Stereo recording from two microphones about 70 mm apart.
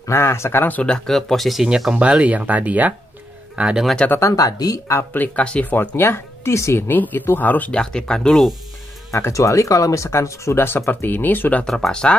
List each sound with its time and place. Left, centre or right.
0.0 s speech: left
0.8 s speech: centre
4.4 s speech: left
5.1 s speech: left
6.9 s speech: left
7.8 s speech: centre
9.3 s speech: left
11.6 s speech: centre